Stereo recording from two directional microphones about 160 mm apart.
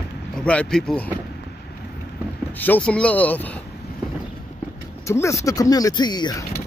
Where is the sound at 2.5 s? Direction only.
10° left (ahead or behind).